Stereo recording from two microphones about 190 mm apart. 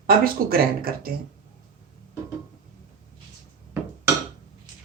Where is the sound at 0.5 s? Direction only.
50° right (ahead or behind).